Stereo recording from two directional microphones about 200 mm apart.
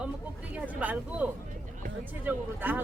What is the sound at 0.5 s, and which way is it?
Speech, 5° right (ahead or behind).